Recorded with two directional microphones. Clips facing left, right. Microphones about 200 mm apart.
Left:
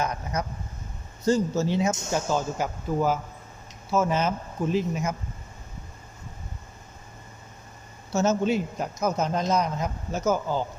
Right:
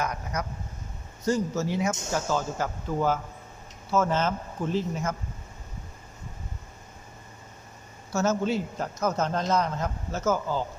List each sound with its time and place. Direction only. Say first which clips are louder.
0.3 s a man's voice: left 2 dB; 25° left (ahead or behind)
8.1 s a man's voice: left 2 dB; 20° left (ahead or behind)